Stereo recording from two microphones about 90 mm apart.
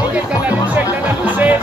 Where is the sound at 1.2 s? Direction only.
20° right (ahead or behind).